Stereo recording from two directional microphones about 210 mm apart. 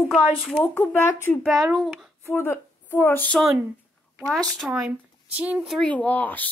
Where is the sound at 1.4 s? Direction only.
Centre (ahead or behind).